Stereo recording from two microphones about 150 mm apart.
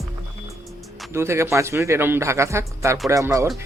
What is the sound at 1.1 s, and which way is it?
Speech, 20° right (ahead or behind).